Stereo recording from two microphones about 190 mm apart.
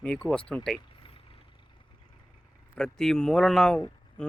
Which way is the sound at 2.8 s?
5° left (ahead or behind).